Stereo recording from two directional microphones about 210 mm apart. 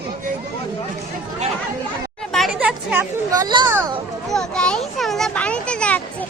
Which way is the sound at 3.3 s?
20° right (ahead or behind).